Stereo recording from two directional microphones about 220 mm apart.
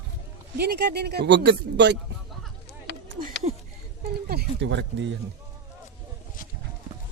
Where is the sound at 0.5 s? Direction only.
45° right (ahead or behind).